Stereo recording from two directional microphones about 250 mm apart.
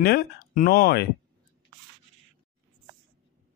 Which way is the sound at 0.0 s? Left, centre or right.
Left.